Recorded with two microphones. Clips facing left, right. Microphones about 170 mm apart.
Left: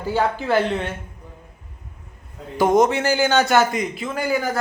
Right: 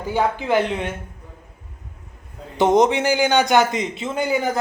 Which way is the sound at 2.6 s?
20° right (ahead or behind).